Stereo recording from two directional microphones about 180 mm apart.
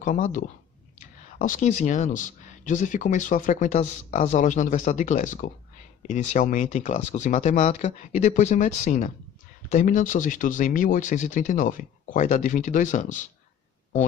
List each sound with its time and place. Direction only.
0.0 s speech: 45° left (ahead or behind)